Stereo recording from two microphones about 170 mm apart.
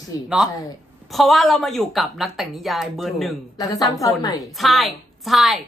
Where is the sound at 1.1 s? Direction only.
Centre (ahead or behind).